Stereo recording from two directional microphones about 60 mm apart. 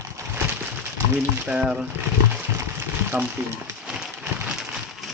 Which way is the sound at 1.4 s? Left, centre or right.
Centre.